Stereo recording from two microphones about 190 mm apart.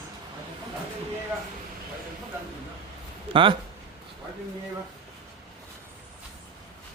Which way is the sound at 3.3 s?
25° right (ahead or behind).